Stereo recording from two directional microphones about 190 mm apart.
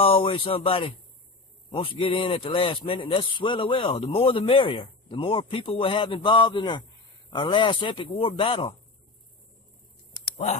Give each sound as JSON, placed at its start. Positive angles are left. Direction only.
{"t": 0.0, "sound": "speech", "side_deg": 30}
{"t": 10.3, "sound": "speech", "side_deg": 35}